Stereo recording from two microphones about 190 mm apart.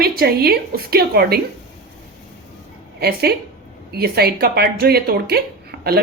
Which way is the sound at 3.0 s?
55° right (ahead or behind).